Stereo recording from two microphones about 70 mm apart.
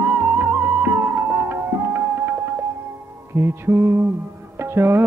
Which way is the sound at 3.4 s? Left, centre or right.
Right.